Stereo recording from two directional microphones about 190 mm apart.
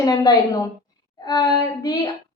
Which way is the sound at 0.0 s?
20° left (ahead or behind).